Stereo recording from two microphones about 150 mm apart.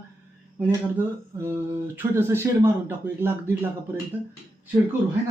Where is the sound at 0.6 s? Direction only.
15° right (ahead or behind).